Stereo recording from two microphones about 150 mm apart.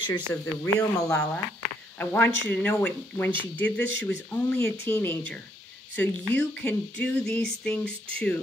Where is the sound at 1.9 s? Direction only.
15° left (ahead or behind).